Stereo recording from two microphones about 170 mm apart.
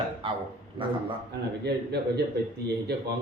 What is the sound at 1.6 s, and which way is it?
Speech, 75° right (ahead or behind).